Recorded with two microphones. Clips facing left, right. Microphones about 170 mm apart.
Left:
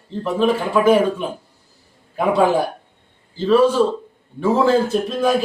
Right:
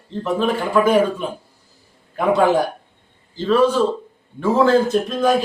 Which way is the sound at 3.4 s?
10° left (ahead or behind).